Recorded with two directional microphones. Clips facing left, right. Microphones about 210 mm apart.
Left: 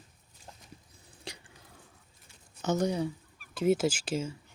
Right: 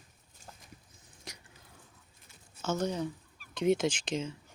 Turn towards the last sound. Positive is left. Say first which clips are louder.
# left 2 dB
turn(degrees=5)  # may be behind; listen again after turning